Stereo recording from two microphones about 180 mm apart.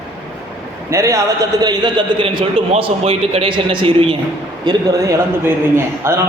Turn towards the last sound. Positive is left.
turn(degrees=-15)  # may be behind; listen again after turning